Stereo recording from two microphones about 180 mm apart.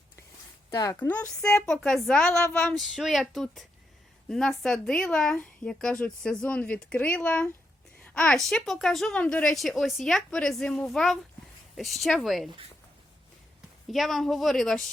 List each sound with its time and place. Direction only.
0.7 s a woman's voice: 20° left (ahead or behind); by 12.5 s centre (ahead or behind)
13.8 s speech: centre (ahead or behind)